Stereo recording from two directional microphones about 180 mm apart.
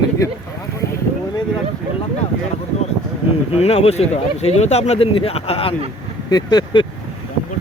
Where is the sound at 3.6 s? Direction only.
35° left (ahead or behind).